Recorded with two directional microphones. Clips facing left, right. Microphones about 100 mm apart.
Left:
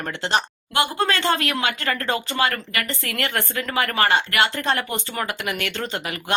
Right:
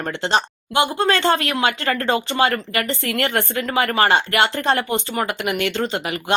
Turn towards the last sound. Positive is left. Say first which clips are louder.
# right 4 dB
turn(degrees=-25)  # may be behind; listen again after turning